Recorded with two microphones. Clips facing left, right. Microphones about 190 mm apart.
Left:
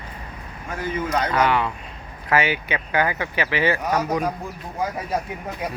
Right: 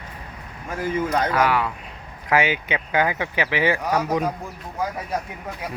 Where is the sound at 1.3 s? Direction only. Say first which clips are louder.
Left 2 dB; 5° right (ahead or behind).